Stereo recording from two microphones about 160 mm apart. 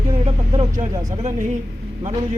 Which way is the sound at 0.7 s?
50° right (ahead or behind).